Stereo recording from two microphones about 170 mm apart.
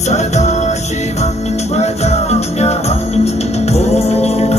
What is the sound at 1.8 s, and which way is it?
Music, 40° left (ahead or behind).